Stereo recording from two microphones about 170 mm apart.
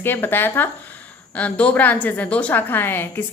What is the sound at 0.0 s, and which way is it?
A woman's voice, 10° left (ahead or behind).